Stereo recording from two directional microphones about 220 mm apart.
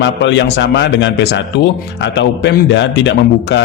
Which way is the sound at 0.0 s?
55° left (ahead or behind).